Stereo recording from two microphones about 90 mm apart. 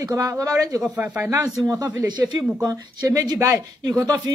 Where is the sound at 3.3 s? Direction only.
25° right (ahead or behind).